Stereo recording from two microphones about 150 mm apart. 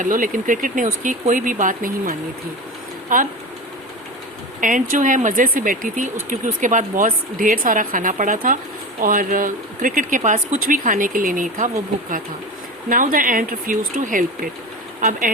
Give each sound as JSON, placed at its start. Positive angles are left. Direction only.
{"t": 0.0, "sound": "speech", "side_deg": -60}
{"t": 4.6, "sound": "speech", "side_deg": -60}
{"t": 12.9, "sound": "speech", "side_deg": -65}